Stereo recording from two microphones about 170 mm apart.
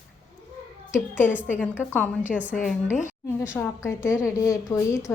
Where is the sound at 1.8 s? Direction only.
10° left (ahead or behind).